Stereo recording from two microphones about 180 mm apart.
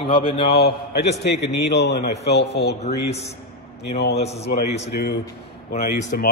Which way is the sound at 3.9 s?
65° left (ahead or behind).